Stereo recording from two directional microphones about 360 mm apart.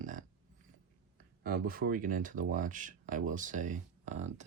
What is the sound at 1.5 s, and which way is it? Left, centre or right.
Speech, right.